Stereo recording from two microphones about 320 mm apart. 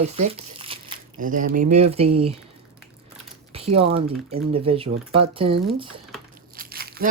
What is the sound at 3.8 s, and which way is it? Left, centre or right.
Speech, centre.